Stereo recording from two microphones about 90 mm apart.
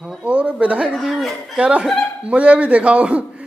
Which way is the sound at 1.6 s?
15° right (ahead or behind).